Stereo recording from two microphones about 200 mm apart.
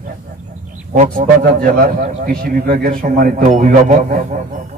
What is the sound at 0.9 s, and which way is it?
A man's voice, 40° right (ahead or behind).